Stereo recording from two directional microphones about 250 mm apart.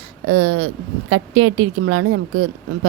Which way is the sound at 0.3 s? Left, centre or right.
Right.